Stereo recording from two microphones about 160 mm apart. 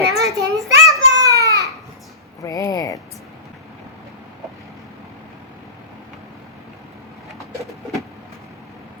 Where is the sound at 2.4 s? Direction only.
20° left (ahead or behind).